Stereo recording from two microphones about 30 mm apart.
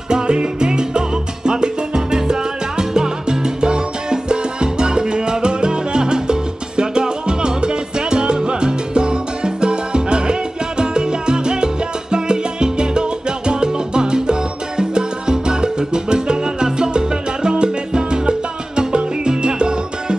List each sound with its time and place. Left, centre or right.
0.1 s salsa music: right